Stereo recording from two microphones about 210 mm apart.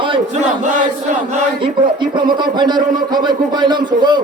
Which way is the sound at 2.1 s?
20° right (ahead or behind).